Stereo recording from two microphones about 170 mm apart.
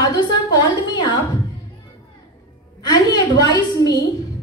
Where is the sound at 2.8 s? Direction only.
25° left (ahead or behind).